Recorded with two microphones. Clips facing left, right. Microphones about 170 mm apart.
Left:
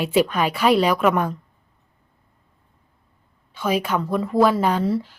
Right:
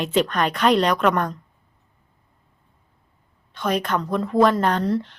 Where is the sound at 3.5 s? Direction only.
5° left (ahead or behind).